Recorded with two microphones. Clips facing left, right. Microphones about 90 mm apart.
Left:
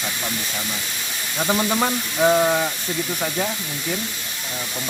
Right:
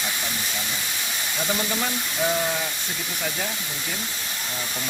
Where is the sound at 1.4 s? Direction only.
45° left (ahead or behind).